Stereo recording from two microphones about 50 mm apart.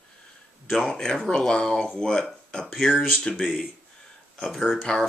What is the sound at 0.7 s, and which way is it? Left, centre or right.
Speech, centre.